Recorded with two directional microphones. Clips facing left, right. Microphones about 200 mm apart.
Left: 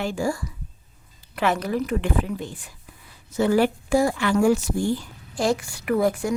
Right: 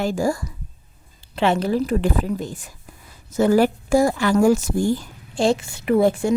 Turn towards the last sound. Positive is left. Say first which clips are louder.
# right 4 dB
turn(degrees=-25)  # may be behind; listen again after turning